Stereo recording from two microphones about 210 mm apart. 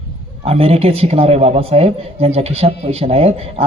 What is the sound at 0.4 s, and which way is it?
A man's voice, 30° right (ahead or behind).